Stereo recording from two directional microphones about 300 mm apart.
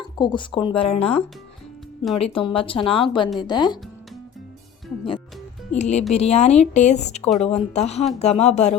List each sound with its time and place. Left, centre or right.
0.2 s speech: centre
5.7 s speech: left